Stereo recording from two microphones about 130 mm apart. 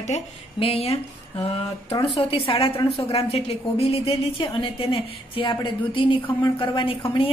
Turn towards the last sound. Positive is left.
turn(degrees=45)  # may be behind; listen again after turning